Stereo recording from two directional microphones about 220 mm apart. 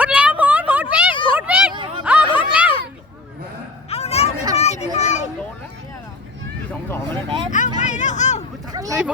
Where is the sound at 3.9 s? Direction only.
30° left (ahead or behind).